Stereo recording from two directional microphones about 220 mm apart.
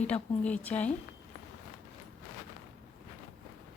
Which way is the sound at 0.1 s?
5° left (ahead or behind).